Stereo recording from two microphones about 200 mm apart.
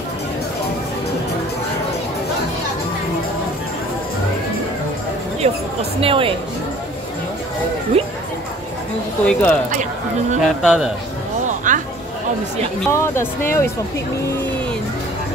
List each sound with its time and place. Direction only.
5.4 s a sound: 35° right (ahead or behind)
5.9 s speech: 25° right (ahead or behind)
8.0 s music: 30° right (ahead or behind)
9.2 s speech: 5° left (ahead or behind)
10.4 s speech: 5° right (ahead or behind)
11.4 s music: 40° right (ahead or behind)
12.9 s speech: 15° left (ahead or behind)